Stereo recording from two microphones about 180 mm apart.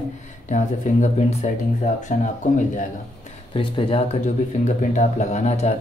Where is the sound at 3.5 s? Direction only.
30° left (ahead or behind).